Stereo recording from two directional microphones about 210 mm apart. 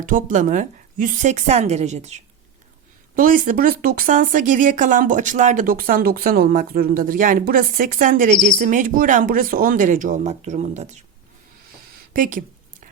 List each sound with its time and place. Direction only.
0.0 s speech: 40° right (ahead or behind)
3.2 s speech: 40° right (ahead or behind)
12.1 s a sound: 40° right (ahead or behind)